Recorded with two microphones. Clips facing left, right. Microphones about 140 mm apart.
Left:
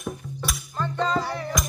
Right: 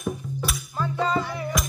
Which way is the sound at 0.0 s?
Centre (ahead or behind).